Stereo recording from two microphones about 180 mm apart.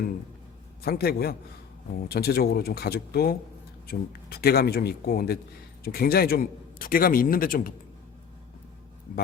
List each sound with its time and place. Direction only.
0.8 s a man's voice: 60° left (ahead or behind)